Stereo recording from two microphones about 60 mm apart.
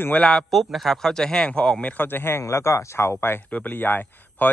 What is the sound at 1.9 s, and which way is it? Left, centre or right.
Speech, left.